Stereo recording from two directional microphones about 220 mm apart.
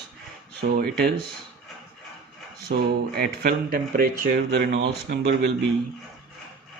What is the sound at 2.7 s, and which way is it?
Speech, 45° right (ahead or behind).